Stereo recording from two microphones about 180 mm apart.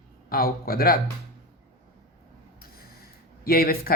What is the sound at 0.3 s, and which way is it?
Speech, 55° left (ahead or behind).